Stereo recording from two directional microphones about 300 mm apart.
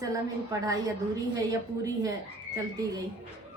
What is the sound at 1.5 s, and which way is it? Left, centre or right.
A woman's voice, centre.